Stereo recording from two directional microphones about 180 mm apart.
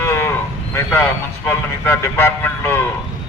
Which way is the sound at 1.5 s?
10° left (ahead or behind).